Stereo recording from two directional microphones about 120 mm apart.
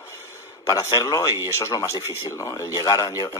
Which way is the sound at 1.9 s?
25° right (ahead or behind).